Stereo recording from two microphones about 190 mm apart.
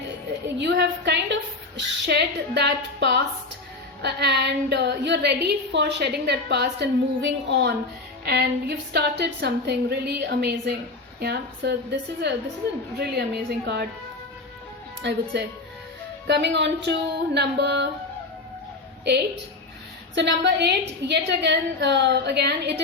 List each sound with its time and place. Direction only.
0.4 s a woman's voice: 65° right (ahead or behind)
15.0 s a woman's voice: 60° right (ahead or behind)
20.1 s a woman's voice: 65° right (ahead or behind)